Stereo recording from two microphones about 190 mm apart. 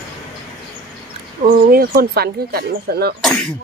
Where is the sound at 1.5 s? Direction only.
50° right (ahead or behind).